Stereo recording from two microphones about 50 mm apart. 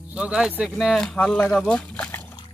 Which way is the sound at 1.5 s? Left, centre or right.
Centre.